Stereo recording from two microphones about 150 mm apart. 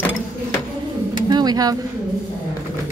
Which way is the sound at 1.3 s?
25° right (ahead or behind).